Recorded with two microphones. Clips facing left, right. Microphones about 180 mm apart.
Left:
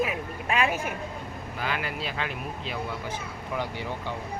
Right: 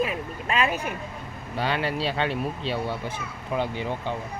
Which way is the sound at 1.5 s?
30° right (ahead or behind).